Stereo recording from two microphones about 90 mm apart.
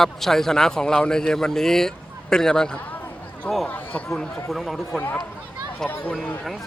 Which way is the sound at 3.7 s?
20° left (ahead or behind).